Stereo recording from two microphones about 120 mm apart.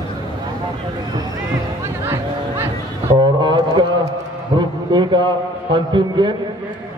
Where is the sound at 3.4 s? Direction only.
40° right (ahead or behind).